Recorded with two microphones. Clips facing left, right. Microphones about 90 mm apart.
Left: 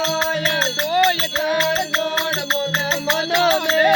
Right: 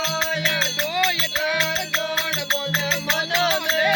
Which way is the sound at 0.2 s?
45° left (ahead or behind).